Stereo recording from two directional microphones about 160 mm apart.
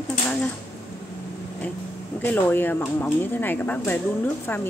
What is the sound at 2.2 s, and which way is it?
Speech, 10° left (ahead or behind).